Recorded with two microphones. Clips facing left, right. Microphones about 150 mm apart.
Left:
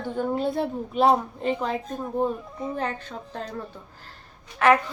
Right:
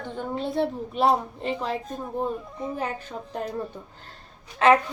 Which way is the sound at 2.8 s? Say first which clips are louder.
Left 1 dB; 10° right (ahead or behind).